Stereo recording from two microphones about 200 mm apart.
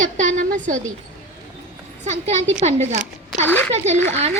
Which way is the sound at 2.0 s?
35° right (ahead or behind).